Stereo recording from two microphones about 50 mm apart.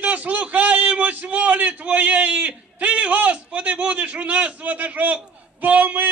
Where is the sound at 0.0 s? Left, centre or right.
Right.